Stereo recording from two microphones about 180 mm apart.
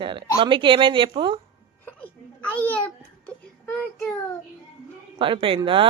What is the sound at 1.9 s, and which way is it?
Speech, 10° left (ahead or behind).